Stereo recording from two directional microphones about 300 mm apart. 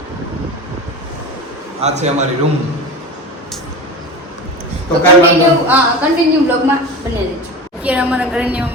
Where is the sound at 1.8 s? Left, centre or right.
Right.